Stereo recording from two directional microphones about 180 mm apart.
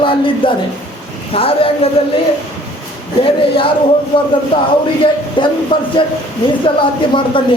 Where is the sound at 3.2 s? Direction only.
30° left (ahead or behind).